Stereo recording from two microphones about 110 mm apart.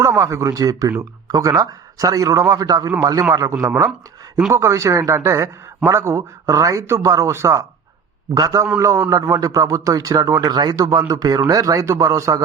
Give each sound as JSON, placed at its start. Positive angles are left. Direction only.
{"t": 0.0, "sound": "speech", "side_deg": -25}
{"t": 4.5, "sound": "speech", "side_deg": -25}